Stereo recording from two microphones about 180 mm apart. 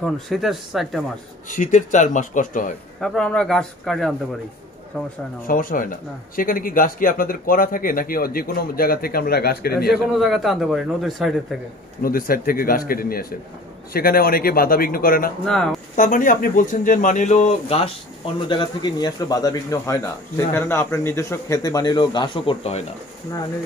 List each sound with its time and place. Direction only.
0.0 s speech: centre (ahead or behind)
1.5 s speech: 45° left (ahead or behind)
3.0 s speech: 5° left (ahead or behind)
5.5 s speech: 50° left (ahead or behind)
9.8 s speech: centre (ahead or behind)
12.0 s a man's voice: 50° left (ahead or behind)
15.4 s speech: centre (ahead or behind)
16.0 s speech: 45° left (ahead or behind)